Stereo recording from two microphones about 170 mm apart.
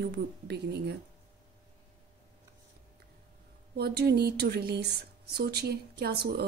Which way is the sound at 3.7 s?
70° right (ahead or behind).